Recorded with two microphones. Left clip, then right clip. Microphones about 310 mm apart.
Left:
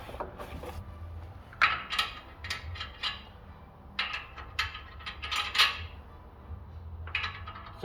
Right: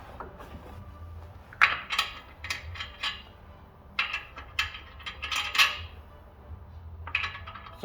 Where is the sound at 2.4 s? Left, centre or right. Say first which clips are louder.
Right 3 dB; centre.